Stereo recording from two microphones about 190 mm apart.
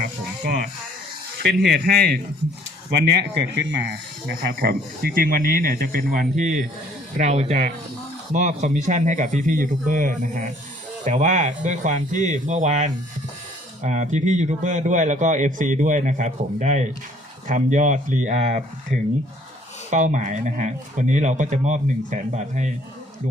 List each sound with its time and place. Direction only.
0.0 s music: 45° right (ahead or behind)
1.4 s speech: 60° right (ahead or behind)
4.6 s a man's voice: 55° right (ahead or behind); by 22.7 s 40° right (ahead or behind)